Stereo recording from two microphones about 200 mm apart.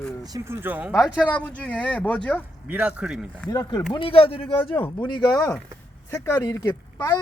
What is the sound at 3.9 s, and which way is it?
Speech, 25° left (ahead or behind).